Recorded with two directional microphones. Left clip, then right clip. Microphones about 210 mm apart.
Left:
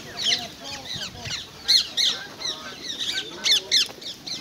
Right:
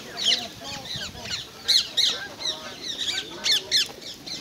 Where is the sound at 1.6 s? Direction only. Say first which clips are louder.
Left 1 dB; centre (ahead or behind).